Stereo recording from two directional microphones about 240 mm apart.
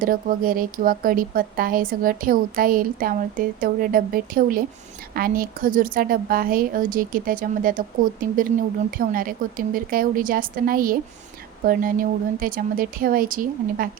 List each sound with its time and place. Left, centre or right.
0.0 s speech: right